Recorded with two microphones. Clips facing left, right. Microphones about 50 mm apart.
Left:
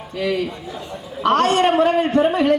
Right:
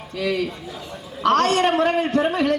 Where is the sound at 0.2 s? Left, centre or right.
Left.